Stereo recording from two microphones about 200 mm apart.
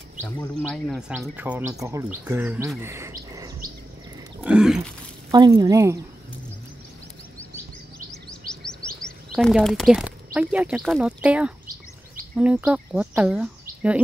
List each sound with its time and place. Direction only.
0.6 s speech: centre (ahead or behind); by 3.5 s 15° right (ahead or behind)
4.4 s wild animals: 5° right (ahead or behind)
5.3 s speech: 20° right (ahead or behind)
8.1 s a sound: 5° left (ahead or behind)
12.4 s speech: 5° right (ahead or behind)